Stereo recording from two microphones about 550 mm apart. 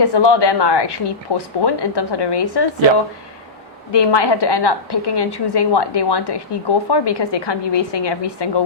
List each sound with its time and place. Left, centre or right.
0.0 s a woman's voice: left
3.9 s a woman's voice: left